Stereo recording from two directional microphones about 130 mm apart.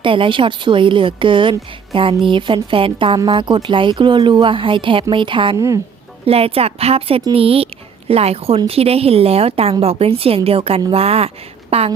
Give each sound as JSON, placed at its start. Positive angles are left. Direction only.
{"t": 0.0, "sound": "a woman's voice", "side_deg": -40}
{"t": 5.5, "sound": "a woman's voice", "side_deg": -25}
{"t": 6.2, "sound": "a woman's voice", "side_deg": -50}